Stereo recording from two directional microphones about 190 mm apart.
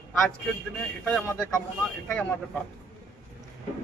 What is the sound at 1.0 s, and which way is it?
Speech, 10° left (ahead or behind).